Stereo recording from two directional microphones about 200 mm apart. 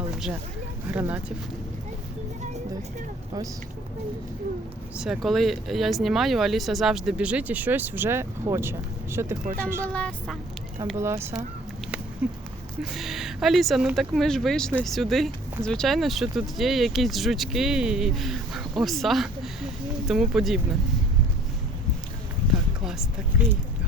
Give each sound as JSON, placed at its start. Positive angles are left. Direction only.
{"t": 0.9, "sound": "speech", "side_deg": -10}
{"t": 4.9, "sound": "speech", "side_deg": -5}
{"t": 9.8, "sound": "speech", "side_deg": 5}
{"t": 10.9, "sound": "speech", "side_deg": -15}
{"t": 22.8, "sound": "a sound", "side_deg": -5}